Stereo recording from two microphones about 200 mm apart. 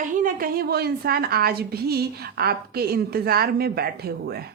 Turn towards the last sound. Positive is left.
turn(degrees=-50)  # may be behind; listen again after turning